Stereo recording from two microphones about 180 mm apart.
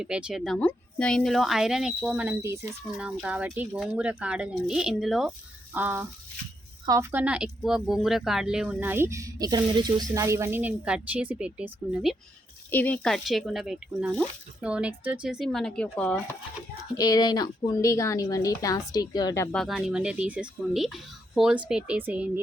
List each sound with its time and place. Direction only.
0.0 s speech: 5° right (ahead or behind)
5.7 s speech: 10° right (ahead or behind)
12.7 s speech: 10° left (ahead or behind)
17.0 s a woman's voice: 20° left (ahead or behind)
19.5 s speech: centre (ahead or behind)